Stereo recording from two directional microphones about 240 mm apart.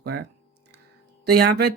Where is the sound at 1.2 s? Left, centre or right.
Right.